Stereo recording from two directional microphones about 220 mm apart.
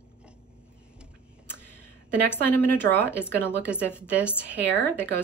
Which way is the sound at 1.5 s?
10° left (ahead or behind).